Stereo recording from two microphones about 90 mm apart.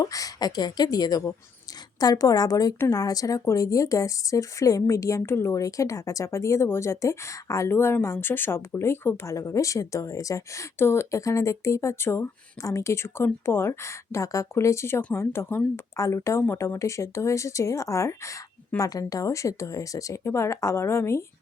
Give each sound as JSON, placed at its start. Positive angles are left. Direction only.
{"t": 0.0, "sound": "speech", "side_deg": 40}